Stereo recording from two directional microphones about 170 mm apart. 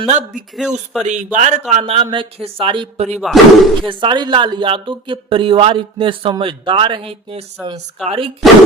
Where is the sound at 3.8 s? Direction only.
30° right (ahead or behind).